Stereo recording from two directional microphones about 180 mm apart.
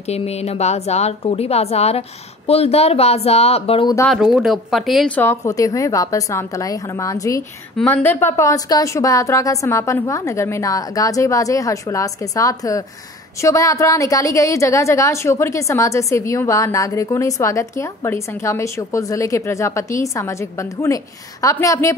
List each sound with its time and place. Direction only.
0.0 s speech: 35° left (ahead or behind)
4.1 s speech: centre (ahead or behind)
5.2 s a woman's voice: 15° left (ahead or behind)